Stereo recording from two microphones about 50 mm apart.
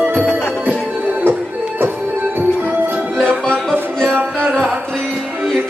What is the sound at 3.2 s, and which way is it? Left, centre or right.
Music, left.